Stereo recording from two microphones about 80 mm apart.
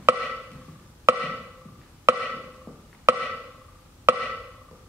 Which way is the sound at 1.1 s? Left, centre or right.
Right.